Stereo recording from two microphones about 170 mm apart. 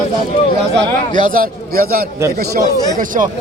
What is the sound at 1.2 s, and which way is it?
Speech, 60° right (ahead or behind).